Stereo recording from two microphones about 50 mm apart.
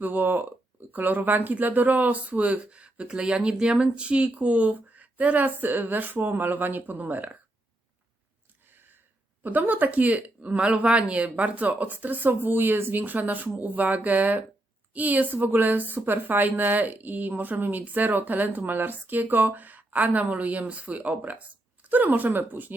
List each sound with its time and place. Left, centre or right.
0.0 s a sound: right
0.9 s speech: right
9.4 s speech: right